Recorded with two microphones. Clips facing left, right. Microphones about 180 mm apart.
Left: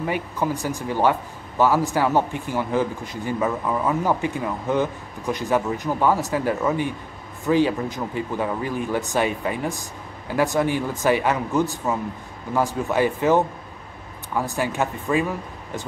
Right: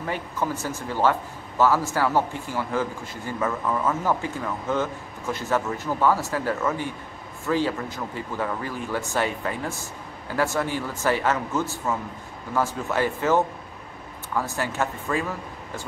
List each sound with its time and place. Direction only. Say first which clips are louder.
0.0 s a man's voice: left 3 dB; 15° left (ahead or behind)